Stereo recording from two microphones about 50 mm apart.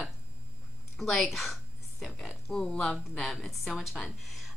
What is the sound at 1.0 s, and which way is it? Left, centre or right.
Speech, centre.